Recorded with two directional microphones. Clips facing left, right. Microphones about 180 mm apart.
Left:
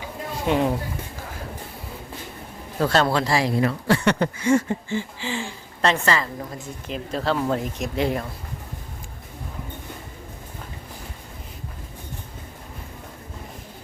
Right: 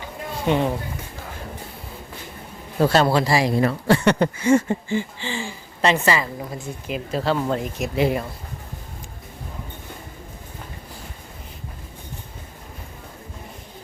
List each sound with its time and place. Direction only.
0.4 s a woman's voice: centre (ahead or behind)
2.8 s speech: 10° right (ahead or behind)
3.6 s speech: 25° right (ahead or behind)
5.2 s a woman's voice: centre (ahead or behind)